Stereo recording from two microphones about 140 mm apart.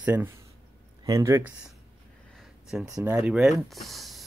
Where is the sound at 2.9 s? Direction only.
15° right (ahead or behind).